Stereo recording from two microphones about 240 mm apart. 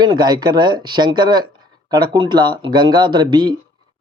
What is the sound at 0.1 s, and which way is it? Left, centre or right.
Speech, centre.